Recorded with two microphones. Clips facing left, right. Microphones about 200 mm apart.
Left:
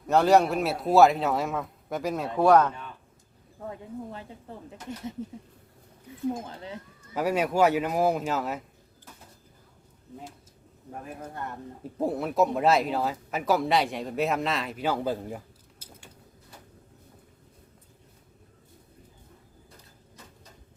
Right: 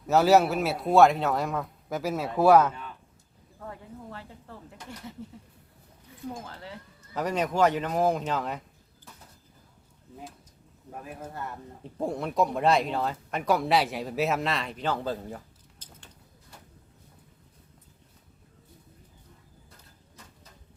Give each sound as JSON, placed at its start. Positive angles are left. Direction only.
{"t": 0.1, "sound": "speech", "side_deg": -5}
{"t": 3.7, "sound": "speech", "side_deg": 20}
{"t": 6.3, "sound": "speech", "side_deg": 20}
{"t": 11.0, "sound": "speech", "side_deg": -5}
{"t": 11.8, "sound": "speech", "side_deg": 5}
{"t": 15.8, "sound": "a sound", "side_deg": 10}